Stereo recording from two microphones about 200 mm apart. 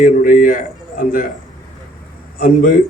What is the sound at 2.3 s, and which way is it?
Speech, 45° left (ahead or behind).